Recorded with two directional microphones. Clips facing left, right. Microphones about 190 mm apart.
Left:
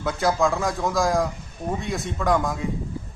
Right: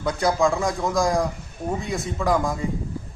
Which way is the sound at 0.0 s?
Centre (ahead or behind).